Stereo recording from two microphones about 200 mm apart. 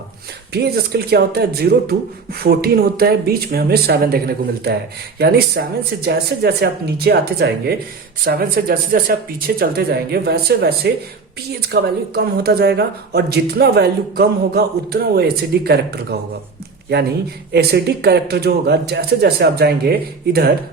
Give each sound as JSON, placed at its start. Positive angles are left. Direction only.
{"t": 0.5, "sound": "speech", "side_deg": -55}
{"t": 5.6, "sound": "speech", "side_deg": -55}
{"t": 17.5, "sound": "speech", "side_deg": -55}